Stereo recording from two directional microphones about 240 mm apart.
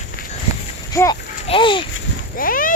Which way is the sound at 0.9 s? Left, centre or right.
Centre.